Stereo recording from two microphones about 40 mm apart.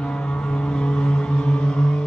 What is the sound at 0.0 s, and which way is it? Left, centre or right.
Vehicle, left.